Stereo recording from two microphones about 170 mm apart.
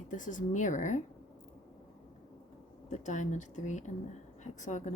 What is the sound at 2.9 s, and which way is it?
Speech, 45° left (ahead or behind).